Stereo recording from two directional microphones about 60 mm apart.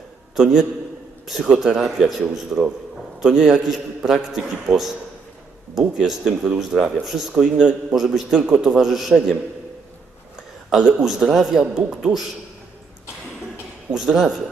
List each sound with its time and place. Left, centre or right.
0.3 s a man's voice: centre
7.9 s a man's voice: centre
13.9 s a man's voice: centre